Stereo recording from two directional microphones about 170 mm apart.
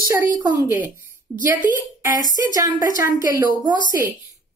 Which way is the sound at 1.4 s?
10° right (ahead or behind).